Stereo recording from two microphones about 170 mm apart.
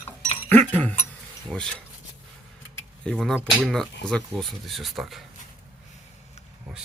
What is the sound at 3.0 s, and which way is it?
Speech, centre (ahead or behind).